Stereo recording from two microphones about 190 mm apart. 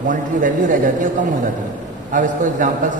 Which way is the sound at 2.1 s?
40° right (ahead or behind).